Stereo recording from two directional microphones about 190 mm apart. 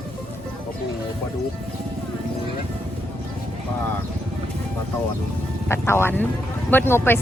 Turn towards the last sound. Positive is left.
turn(degrees=10)  # may be behind; listen again after turning